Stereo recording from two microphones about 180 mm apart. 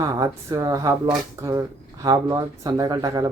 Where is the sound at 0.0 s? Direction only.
20° right (ahead or behind).